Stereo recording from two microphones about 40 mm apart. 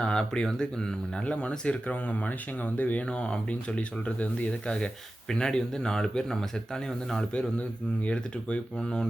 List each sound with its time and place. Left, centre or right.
0.0 s speech: centre
1.1 s speech: left
3.1 s speech: left